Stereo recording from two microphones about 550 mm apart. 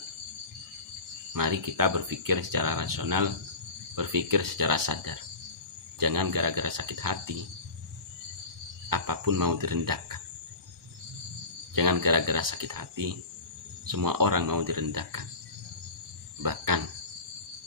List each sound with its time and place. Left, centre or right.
1.3 s speech: right
8.8 s speech: right
11.7 s speech: right
16.4 s speech: right